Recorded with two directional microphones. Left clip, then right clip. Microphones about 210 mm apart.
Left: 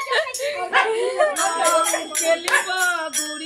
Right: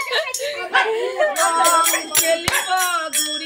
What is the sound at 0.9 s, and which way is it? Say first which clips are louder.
Dog: even; centre (ahead or behind).